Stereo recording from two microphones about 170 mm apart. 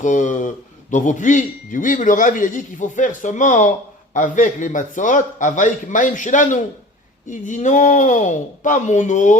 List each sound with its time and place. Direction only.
0.0 s a man's voice: 50° left (ahead or behind)